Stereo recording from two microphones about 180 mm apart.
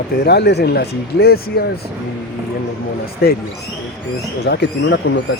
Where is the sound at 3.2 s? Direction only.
60° left (ahead or behind).